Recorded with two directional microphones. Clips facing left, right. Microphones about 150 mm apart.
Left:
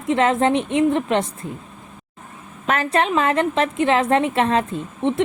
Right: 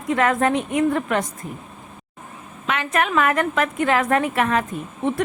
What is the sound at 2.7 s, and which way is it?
A woman's voice, 35° left (ahead or behind).